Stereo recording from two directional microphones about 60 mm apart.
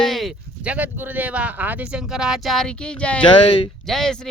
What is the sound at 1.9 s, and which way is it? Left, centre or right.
Speech, centre.